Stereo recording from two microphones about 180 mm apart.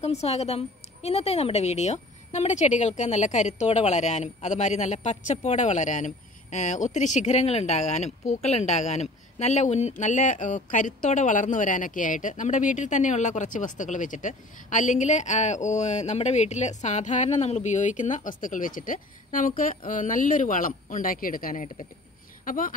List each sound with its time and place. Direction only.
0.0 s a woman's voice: 35° left (ahead or behind)